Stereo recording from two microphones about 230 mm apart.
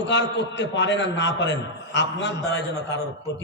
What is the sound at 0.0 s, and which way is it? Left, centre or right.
A man's voice, left.